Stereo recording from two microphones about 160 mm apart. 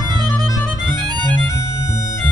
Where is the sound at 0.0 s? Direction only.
25° right (ahead or behind).